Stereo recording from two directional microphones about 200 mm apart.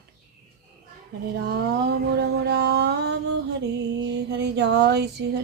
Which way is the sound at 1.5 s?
55° right (ahead or behind).